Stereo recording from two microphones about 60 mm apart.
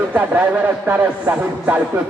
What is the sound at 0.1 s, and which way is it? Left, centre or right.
Speech, right.